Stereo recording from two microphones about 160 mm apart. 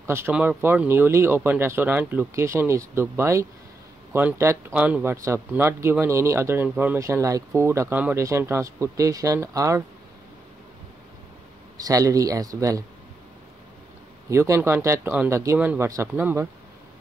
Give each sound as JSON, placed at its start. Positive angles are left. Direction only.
{"t": 0.0, "sound": "speech", "side_deg": -15}
{"t": 11.7, "sound": "a man's voice", "side_deg": -20}
{"t": 14.3, "sound": "speech", "side_deg": -15}